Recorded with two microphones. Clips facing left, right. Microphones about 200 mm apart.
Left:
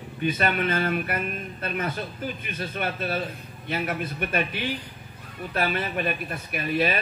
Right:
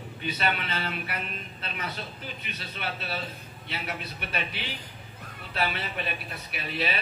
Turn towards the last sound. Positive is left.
turn(degrees=50)  # may be behind; listen again after turning